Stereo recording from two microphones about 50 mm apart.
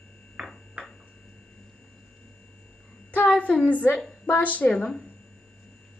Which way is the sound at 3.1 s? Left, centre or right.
Left.